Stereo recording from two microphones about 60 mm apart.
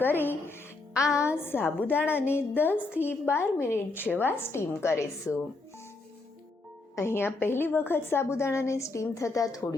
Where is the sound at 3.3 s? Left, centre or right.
Left.